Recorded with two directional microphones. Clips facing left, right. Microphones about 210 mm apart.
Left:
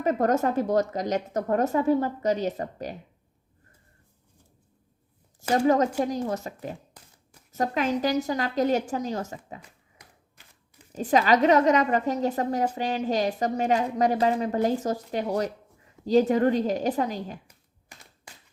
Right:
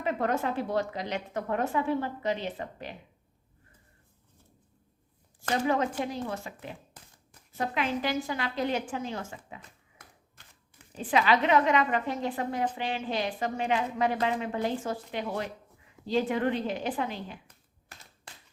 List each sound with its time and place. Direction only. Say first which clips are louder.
0.0 s a woman's voice: left 6 dB; 40° left (ahead or behind)
5.5 s a woman's voice: left 6 dB; 40° left (ahead or behind)
9.6 s a sound: left 2 dB; 10° left (ahead or behind)
10.9 s a woman's voice: left 4 dB; 40° left (ahead or behind)